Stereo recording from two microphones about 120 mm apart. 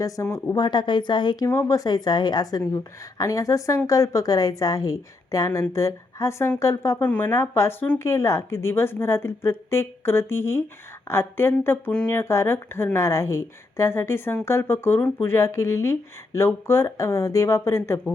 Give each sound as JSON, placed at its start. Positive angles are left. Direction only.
{"t": 0.0, "sound": "speech", "side_deg": 25}
{"t": 0.5, "sound": "a woman's voice", "side_deg": 40}
{"t": 1.5, "sound": "speech", "side_deg": 25}
{"t": 7.0, "sound": "speech", "side_deg": 15}